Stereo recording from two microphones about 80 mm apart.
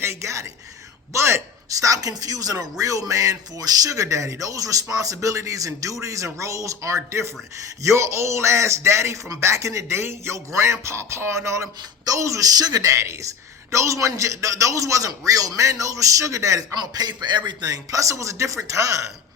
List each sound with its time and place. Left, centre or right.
0.0 s a man's voice: right
1.8 s a man's voice: right
16.7 s a man's voice: right
17.7 s speech: right